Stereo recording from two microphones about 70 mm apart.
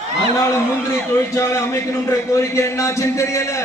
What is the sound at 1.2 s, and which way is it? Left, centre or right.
A man's voice, left.